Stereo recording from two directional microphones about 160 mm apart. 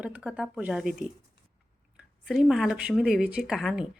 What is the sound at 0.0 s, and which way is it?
Speech, 5° right (ahead or behind).